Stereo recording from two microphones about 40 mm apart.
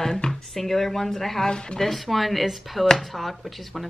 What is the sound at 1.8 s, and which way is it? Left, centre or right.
Speech, centre.